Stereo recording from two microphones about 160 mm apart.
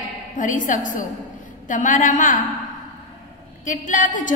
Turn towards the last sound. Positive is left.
turn(degrees=55)  # may be behind; listen again after turning